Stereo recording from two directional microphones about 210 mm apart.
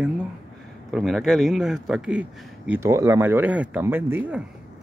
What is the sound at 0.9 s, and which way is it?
Speech, centre (ahead or behind).